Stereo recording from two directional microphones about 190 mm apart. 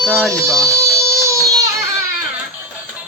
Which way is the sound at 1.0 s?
15° right (ahead or behind).